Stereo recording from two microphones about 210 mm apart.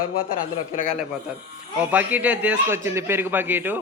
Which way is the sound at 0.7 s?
35° left (ahead or behind).